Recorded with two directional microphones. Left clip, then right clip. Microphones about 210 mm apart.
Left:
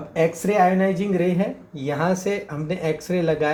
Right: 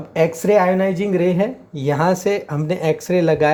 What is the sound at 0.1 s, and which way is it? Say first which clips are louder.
Speech: right 6 dB; 50° right (ahead or behind).